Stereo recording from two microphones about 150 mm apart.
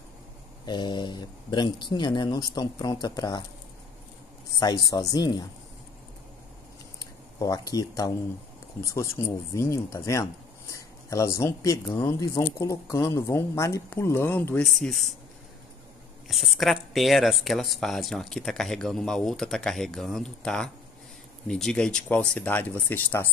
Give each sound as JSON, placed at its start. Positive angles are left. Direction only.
{"t": 0.7, "sound": "speech", "side_deg": 30}
{"t": 4.6, "sound": "speech", "side_deg": 25}
{"t": 7.3, "sound": "speech", "side_deg": 25}
{"t": 14.7, "sound": "speech", "side_deg": 0}
{"t": 16.3, "sound": "speech", "side_deg": 0}